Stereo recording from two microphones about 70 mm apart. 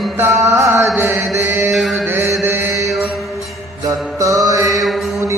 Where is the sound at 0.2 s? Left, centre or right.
Right.